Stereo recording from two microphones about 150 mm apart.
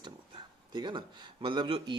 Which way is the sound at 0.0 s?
30° right (ahead or behind).